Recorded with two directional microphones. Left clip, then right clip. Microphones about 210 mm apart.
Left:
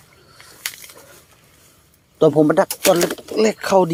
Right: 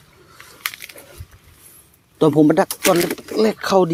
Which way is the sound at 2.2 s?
10° right (ahead or behind).